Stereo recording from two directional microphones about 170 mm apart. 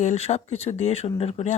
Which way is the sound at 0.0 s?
40° left (ahead or behind).